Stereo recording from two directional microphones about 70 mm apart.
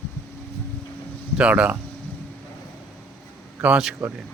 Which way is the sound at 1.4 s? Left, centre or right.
Centre.